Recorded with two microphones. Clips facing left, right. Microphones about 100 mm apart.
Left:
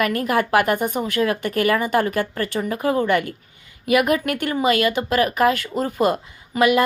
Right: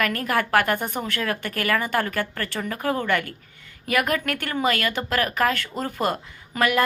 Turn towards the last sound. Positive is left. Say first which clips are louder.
# left 5 dB
turn(degrees=15)  # may be behind; listen again after turning